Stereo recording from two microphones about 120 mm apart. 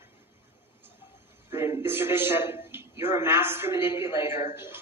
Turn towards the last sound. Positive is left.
turn(degrees=-20)  # may be behind; listen again after turning